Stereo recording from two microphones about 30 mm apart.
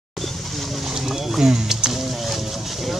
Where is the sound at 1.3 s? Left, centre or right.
Right.